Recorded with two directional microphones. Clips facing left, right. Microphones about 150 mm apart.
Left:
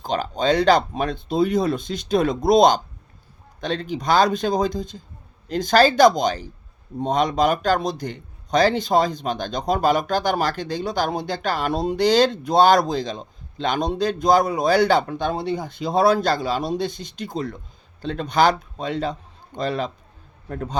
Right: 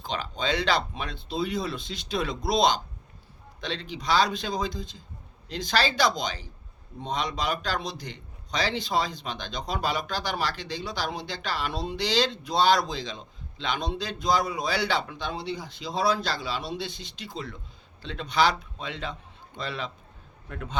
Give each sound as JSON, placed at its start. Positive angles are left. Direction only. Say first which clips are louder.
{"t": 0.0, "sound": "a man's voice", "louder": "left 8 dB", "side_deg": 45}